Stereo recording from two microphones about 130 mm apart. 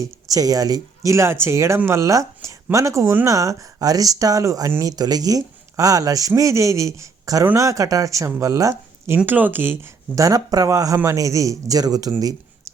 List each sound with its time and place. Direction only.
0.0 s speech: 25° right (ahead or behind)
8.7 s speech: 15° right (ahead or behind)